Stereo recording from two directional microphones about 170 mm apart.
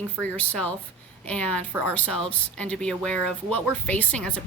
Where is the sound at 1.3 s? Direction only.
5° left (ahead or behind).